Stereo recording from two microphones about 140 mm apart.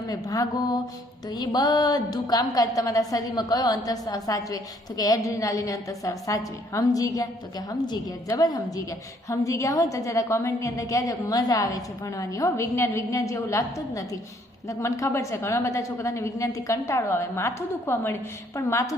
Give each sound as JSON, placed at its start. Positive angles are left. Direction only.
{"t": 0.1, "sound": "a woman's voice", "side_deg": 25}
{"t": 8.3, "sound": "a woman's voice", "side_deg": 25}